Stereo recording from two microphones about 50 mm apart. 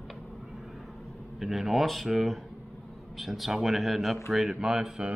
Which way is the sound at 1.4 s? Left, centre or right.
Centre.